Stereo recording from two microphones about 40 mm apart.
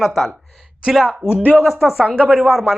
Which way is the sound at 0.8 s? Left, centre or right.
Centre.